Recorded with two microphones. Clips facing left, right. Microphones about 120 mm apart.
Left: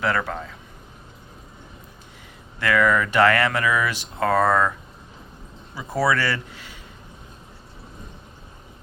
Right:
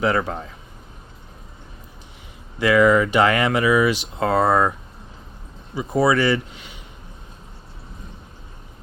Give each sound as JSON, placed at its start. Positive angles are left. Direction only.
{"t": 0.0, "sound": "speech", "side_deg": -15}
{"t": 2.6, "sound": "speech", "side_deg": -15}
{"t": 4.4, "sound": "speech", "side_deg": -25}
{"t": 5.7, "sound": "speech", "side_deg": -20}